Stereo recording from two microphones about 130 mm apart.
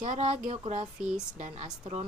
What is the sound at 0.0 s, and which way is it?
Speech, 70° right (ahead or behind).